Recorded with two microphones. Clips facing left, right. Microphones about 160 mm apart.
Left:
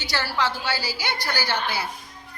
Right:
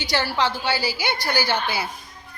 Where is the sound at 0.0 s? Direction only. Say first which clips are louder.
Right 3 dB; 15° right (ahead or behind).